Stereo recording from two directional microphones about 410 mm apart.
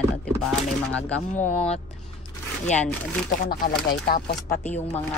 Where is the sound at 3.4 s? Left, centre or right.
Left.